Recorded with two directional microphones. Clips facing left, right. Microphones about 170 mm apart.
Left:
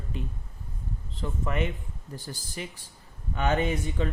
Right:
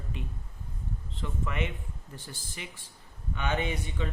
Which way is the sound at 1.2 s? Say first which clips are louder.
Left 4 dB; 40° left (ahead or behind).